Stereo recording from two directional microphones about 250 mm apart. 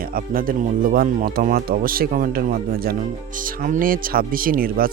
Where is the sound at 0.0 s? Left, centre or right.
Right.